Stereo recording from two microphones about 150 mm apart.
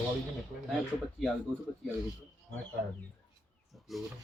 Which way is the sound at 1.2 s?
Centre (ahead or behind).